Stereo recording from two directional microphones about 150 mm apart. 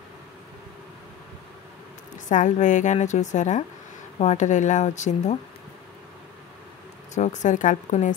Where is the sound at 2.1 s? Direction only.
55° left (ahead or behind).